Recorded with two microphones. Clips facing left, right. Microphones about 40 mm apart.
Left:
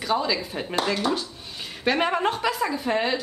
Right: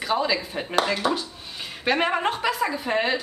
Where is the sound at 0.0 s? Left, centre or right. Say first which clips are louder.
Right 1 dB; centre.